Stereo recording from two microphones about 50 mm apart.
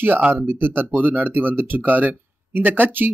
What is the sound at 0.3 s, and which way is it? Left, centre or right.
Speech, right.